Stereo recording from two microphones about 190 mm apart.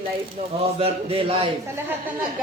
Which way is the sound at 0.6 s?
30° right (ahead or behind).